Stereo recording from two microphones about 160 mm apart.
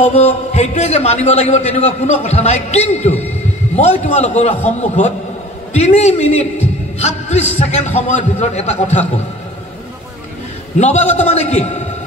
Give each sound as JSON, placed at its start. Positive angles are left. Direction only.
{"t": 0.0, "sound": "a man's voice", "side_deg": 45}
{"t": 10.8, "sound": "a man's voice", "side_deg": 45}